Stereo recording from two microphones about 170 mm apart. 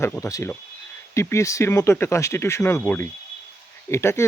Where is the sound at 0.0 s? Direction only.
15° left (ahead or behind).